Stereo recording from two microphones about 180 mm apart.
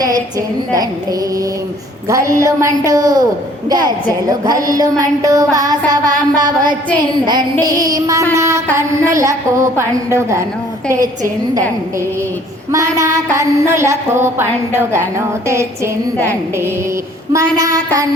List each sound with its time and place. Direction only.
0.0 s music: 20° right (ahead or behind)
2.0 s a woman's voice: 20° right (ahead or behind)
2.4 s music: 20° right (ahead or behind)
4.3 s music: 20° right (ahead or behind)
7.8 s a woman's voice: 20° right (ahead or behind)
10.8 s music: 20° right (ahead or behind)
12.7 s music: 20° right (ahead or behind)
13.3 s a woman's voice: 15° right (ahead or behind)
17.3 s music: 20° right (ahead or behind)